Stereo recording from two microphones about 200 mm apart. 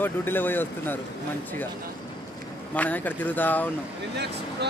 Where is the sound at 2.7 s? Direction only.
10° left (ahead or behind).